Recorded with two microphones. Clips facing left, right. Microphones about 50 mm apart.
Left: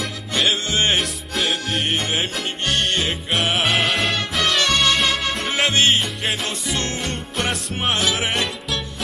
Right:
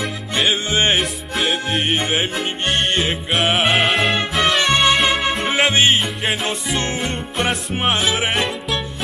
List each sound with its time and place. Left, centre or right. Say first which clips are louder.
0.0 s music: right 2 dB; centre
2.6 s music: right 1 dB; centre
3.0 s music: right 3 dB; centre